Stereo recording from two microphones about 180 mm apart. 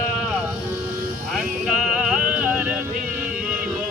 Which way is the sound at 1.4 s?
5° right (ahead or behind).